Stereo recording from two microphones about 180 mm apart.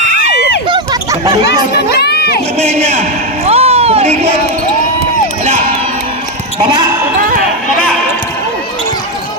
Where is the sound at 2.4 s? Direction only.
35° right (ahead or behind).